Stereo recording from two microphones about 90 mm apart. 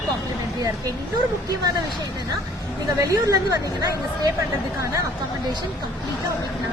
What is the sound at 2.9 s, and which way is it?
Speech, 35° right (ahead or behind).